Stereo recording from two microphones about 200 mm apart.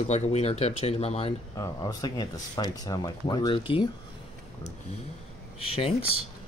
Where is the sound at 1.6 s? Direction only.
20° left (ahead or behind).